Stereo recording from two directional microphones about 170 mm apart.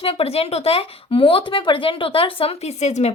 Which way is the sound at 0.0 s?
35° left (ahead or behind).